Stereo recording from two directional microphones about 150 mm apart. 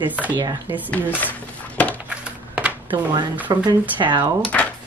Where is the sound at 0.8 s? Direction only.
10° left (ahead or behind).